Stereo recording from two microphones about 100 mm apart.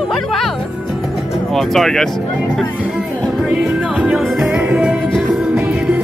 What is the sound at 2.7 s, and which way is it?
Music, 10° right (ahead or behind).